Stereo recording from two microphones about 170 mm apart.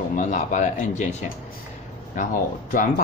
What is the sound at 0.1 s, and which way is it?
Speech, 50° left (ahead or behind).